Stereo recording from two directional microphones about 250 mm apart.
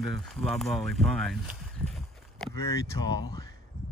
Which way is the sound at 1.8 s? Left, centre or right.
Centre.